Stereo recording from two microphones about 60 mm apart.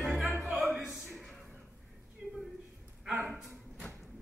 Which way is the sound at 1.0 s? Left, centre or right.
Centre.